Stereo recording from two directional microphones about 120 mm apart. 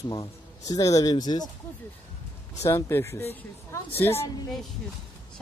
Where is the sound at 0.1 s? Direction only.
35° left (ahead or behind).